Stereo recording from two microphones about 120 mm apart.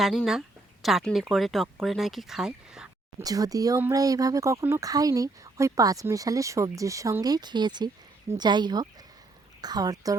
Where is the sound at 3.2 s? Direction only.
30° right (ahead or behind).